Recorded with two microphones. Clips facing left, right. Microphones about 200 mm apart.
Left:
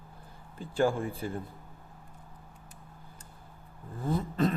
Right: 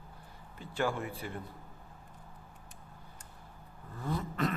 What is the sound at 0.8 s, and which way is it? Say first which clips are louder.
Speech: left 6 dB; 30° left (ahead or behind).